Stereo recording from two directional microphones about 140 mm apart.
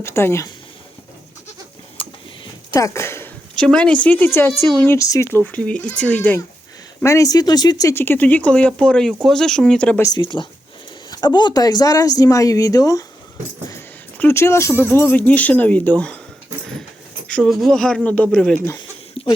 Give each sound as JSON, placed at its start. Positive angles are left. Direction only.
{"t": 0.0, "sound": "speech", "side_deg": 20}
{"t": 2.0, "sound": "tick-tock", "side_deg": 40}
{"t": 2.7, "sound": "speech", "side_deg": 20}
{"t": 3.5, "sound": "speech", "side_deg": 5}
{"t": 5.5, "sound": "speech", "side_deg": 10}
{"t": 7.0, "sound": "speech", "side_deg": 20}
{"t": 10.0, "sound": "speech", "side_deg": 30}
{"t": 14.2, "sound": "speech", "side_deg": 15}
{"t": 17.2, "sound": "speech", "side_deg": 5}
{"t": 19.2, "sound": "a sound", "side_deg": 45}